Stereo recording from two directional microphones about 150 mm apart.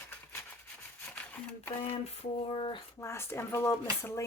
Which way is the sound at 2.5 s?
35° left (ahead or behind).